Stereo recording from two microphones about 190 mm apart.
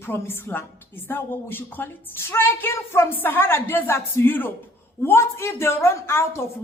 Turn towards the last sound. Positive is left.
turn(degrees=15)  # may be behind; listen again after turning